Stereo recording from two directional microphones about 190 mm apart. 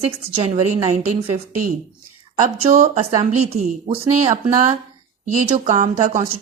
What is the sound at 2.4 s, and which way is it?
A woman's voice, 35° right (ahead or behind).